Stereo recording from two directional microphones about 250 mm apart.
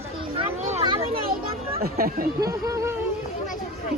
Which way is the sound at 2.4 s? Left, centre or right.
Centre.